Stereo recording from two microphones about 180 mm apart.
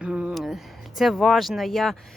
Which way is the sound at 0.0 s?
5° right (ahead or behind).